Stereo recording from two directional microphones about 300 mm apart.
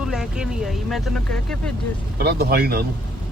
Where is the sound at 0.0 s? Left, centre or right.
Centre.